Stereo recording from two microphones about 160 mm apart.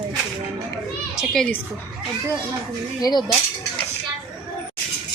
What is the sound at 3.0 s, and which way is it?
Speech, 25° left (ahead or behind).